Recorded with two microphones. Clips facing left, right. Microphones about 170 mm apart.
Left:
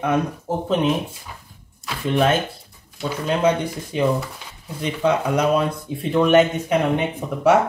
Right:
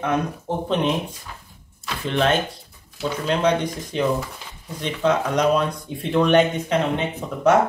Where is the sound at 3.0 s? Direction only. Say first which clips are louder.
Left 1 dB; 5° left (ahead or behind).